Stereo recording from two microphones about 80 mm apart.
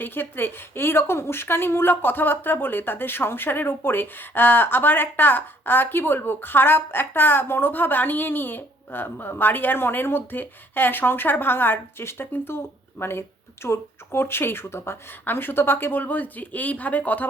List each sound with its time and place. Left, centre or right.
0.0 s speech: left